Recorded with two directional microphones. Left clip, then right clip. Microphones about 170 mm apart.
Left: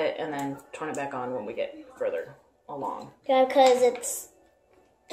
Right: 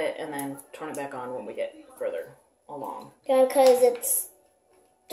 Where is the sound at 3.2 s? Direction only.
30° right (ahead or behind).